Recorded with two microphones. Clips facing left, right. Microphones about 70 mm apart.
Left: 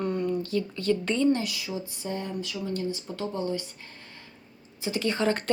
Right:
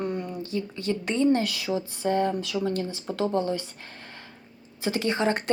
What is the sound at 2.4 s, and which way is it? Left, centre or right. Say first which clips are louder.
Speech: right 4 dB; right.